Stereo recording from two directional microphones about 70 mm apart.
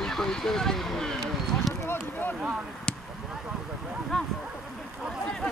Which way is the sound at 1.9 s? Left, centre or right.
Left.